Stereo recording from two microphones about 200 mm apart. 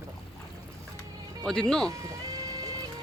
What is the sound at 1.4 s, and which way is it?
Speech, 5° left (ahead or behind).